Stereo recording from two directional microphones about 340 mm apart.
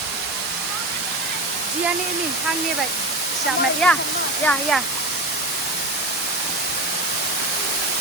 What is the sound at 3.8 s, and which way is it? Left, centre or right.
Speech, centre.